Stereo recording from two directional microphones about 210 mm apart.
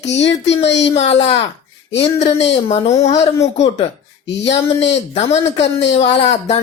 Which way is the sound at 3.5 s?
30° left (ahead or behind).